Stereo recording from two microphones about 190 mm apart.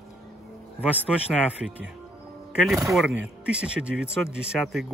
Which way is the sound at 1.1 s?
Centre (ahead or behind).